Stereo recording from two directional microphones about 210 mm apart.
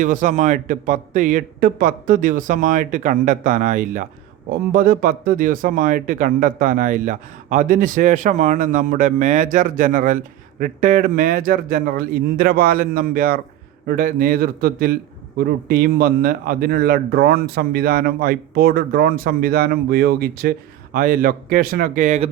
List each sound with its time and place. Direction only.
0.0 s a man's voice: 35° right (ahead or behind)